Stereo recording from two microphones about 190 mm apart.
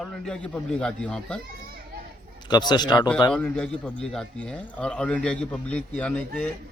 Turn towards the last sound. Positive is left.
turn(degrees=5)  # may be behind; listen again after turning